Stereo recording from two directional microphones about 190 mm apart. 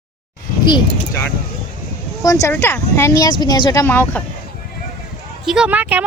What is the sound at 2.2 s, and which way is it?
Speech, 15° left (ahead or behind).